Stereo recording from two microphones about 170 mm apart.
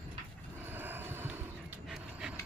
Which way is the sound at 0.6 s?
10° right (ahead or behind).